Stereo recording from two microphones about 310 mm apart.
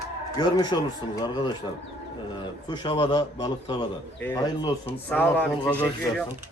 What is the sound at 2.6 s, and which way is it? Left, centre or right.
A man's voice, centre.